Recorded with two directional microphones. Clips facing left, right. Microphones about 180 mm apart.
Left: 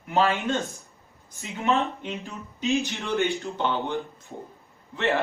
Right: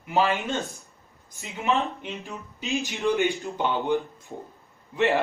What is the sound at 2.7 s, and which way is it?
Speech, 15° right (ahead or behind).